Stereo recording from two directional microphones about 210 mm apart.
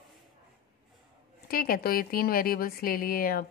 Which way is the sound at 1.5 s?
45° left (ahead or behind).